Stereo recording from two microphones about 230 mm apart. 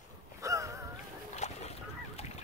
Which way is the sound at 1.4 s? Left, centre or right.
Left.